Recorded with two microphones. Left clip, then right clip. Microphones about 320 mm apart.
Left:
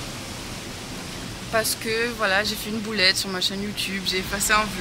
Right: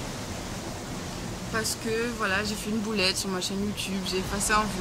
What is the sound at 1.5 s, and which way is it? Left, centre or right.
Speech, centre.